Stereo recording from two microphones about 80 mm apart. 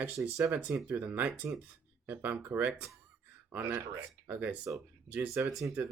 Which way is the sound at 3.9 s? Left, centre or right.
Centre.